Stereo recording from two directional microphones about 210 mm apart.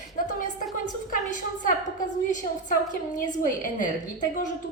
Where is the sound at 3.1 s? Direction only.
40° left (ahead or behind).